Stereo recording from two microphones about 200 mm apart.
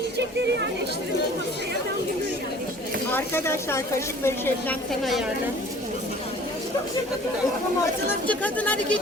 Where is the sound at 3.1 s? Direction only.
10° left (ahead or behind).